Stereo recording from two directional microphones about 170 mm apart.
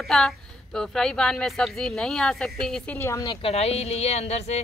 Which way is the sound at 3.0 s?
20° left (ahead or behind).